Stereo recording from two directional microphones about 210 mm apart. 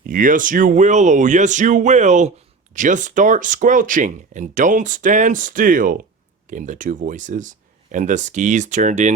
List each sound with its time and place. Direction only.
0.0 s speech: 40° right (ahead or behind)